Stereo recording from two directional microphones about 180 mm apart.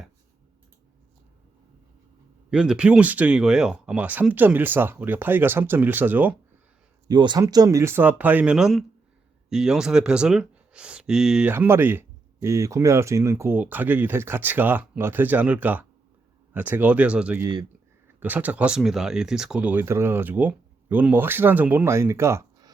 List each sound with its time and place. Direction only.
2.5 s speech: 5° right (ahead or behind)
7.1 s speech: 25° right (ahead or behind); by 17.4 s 5° right (ahead or behind)
17.4 s speech: 20° right (ahead or behind)
18.2 s speech: 10° right (ahead or behind)